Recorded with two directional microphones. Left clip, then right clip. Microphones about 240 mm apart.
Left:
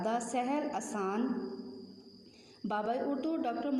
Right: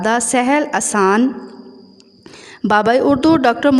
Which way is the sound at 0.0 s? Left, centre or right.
Right.